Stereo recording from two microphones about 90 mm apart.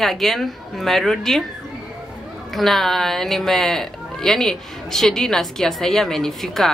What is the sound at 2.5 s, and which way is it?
Speech, centre (ahead or behind).